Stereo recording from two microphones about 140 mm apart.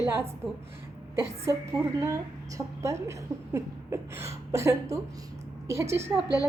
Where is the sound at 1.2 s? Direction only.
20° right (ahead or behind).